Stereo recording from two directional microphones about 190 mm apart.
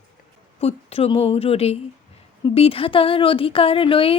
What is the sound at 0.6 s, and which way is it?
A woman's voice, 30° left (ahead or behind).